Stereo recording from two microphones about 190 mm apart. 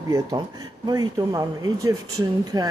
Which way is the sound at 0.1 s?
20° right (ahead or behind).